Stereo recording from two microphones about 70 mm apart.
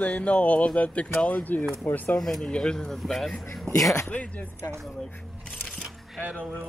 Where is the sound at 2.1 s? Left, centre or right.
Centre.